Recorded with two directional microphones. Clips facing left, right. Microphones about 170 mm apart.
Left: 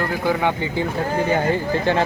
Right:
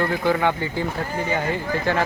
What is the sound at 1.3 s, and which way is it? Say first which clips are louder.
Speech: left 2 dB; 35° left (ahead or behind).